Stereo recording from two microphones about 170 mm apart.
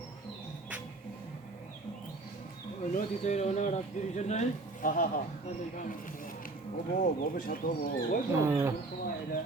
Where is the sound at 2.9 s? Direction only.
45° left (ahead or behind).